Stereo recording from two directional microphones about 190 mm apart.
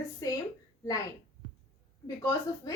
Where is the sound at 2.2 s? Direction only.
20° left (ahead or behind).